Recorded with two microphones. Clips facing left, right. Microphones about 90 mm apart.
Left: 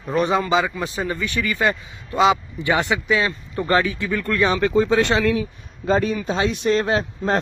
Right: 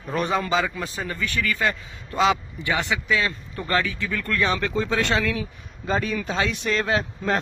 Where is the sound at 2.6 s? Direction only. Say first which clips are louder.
Left 5 dB; 25° left (ahead or behind).